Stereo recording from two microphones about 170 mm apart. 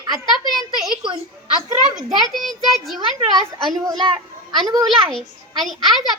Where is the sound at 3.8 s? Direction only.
25° right (ahead or behind).